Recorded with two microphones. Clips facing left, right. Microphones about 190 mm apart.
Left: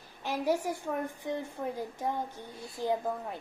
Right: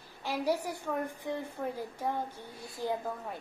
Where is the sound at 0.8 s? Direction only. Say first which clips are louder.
Even; 15° left (ahead or behind).